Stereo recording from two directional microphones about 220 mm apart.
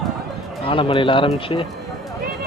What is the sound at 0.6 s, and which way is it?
Speech, 25° left (ahead or behind).